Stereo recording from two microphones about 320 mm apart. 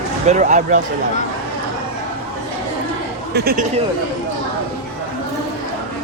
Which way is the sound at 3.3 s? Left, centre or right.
Right.